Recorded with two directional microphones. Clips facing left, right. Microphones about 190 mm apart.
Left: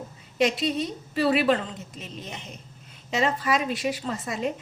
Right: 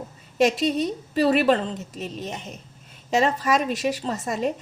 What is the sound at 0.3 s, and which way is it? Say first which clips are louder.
A woman's voice: right 4 dB; 45° right (ahead or behind).